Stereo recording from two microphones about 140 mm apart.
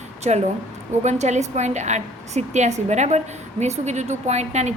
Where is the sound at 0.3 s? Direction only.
50° right (ahead or behind).